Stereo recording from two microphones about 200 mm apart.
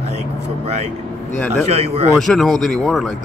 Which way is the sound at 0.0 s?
30° right (ahead or behind).